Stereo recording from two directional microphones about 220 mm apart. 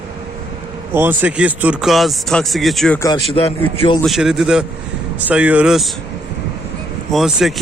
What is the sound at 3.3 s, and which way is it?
Speech, 25° left (ahead or behind).